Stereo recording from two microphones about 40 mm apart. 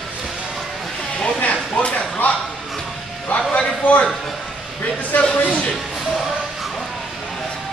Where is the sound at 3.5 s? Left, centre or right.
Left.